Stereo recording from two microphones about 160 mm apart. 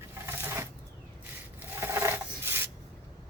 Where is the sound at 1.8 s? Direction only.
15° right (ahead or behind).